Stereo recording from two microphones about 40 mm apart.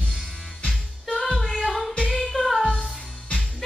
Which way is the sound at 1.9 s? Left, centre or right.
Left.